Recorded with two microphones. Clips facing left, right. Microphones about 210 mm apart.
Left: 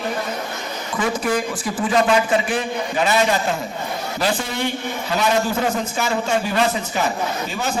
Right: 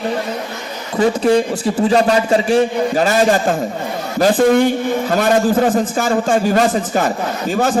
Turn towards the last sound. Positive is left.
turn(degrees=-50)  # may be behind; listen again after turning